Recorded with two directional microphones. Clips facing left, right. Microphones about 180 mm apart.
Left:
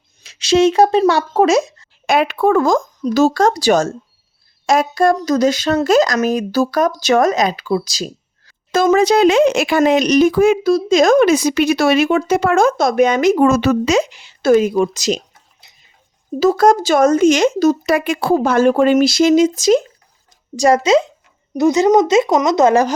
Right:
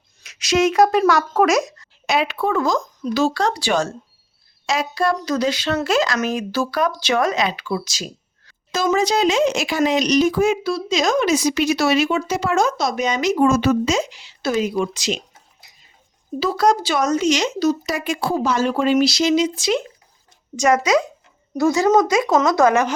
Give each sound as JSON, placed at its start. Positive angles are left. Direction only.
{"t": 0.2, "sound": "speech", "side_deg": 30}
{"t": 2.0, "sound": "speech", "side_deg": 50}
{"t": 8.7, "sound": "speech", "side_deg": 55}
{"t": 10.7, "sound": "speech", "side_deg": 45}
{"t": 15.6, "sound": "a sound", "side_deg": 25}
{"t": 16.4, "sound": "speech", "side_deg": 45}
{"t": 20.6, "sound": "speech", "side_deg": 30}